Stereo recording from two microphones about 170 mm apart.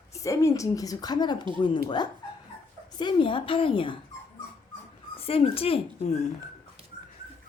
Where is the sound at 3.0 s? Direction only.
30° left (ahead or behind).